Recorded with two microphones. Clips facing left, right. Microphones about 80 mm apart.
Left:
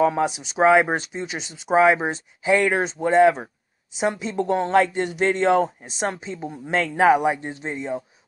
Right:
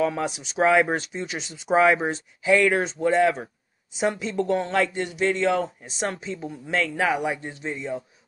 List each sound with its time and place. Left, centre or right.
0.0 s speech: centre
2.0 s speech: left
3.0 s speech: left
4.0 s speech: centre
4.5 s a man's voice: left
5.9 s speech: centre